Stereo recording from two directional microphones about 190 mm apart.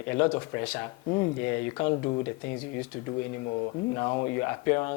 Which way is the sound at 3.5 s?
25° left (ahead or behind).